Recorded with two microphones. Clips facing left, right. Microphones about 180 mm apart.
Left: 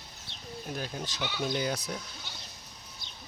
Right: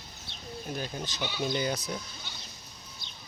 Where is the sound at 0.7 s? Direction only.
Centre (ahead or behind).